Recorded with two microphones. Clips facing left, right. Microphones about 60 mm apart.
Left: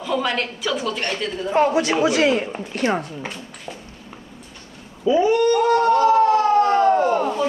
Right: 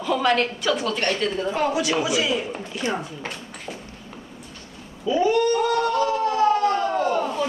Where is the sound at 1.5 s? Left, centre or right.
Left.